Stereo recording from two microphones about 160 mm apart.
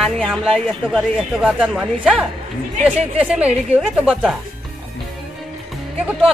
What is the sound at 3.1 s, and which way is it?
A woman's voice, 5° right (ahead or behind).